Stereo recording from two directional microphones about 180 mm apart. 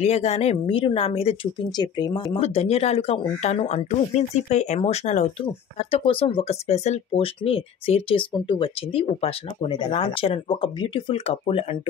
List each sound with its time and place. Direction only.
0.0 s speech: 35° left (ahead or behind)